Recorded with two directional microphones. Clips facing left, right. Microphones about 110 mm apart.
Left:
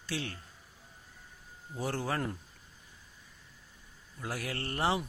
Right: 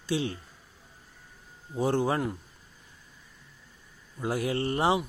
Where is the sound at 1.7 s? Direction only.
20° right (ahead or behind).